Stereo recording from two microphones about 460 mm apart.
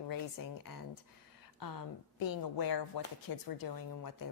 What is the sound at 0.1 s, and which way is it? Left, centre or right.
Speech, left.